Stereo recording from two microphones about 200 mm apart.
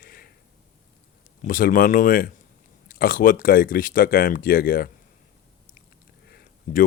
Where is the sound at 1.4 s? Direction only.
45° left (ahead or behind).